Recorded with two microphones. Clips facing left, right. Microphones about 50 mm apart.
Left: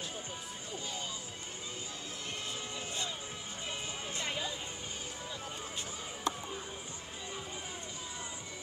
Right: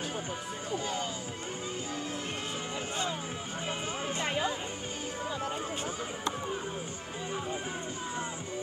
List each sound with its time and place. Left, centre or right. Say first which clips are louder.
0.7 s music: right 9 dB; right
4.2 s music: right 6 dB; right